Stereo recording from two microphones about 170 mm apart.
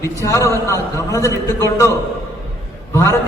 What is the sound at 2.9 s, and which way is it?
Speech, 15° left (ahead or behind).